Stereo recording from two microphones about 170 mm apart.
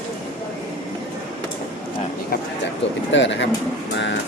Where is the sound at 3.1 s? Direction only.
90° left.